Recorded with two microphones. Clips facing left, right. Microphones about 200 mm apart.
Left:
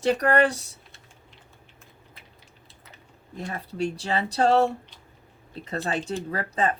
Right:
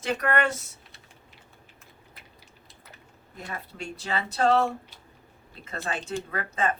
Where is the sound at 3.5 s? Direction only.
35° left (ahead or behind).